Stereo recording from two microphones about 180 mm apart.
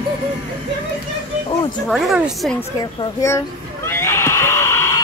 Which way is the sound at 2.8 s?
20° left (ahead or behind).